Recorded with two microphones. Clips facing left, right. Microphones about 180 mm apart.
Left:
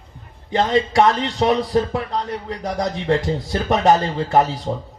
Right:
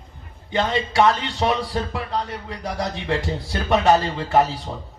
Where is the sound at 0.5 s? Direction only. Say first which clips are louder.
Left 4 dB; 35° left (ahead or behind).